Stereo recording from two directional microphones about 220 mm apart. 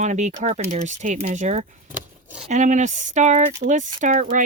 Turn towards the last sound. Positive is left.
turn(degrees=-35)  # may be behind; listen again after turning